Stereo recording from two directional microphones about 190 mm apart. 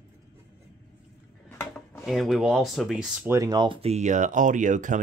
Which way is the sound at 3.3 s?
20° right (ahead or behind).